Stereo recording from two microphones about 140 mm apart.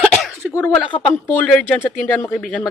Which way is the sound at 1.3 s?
10° left (ahead or behind).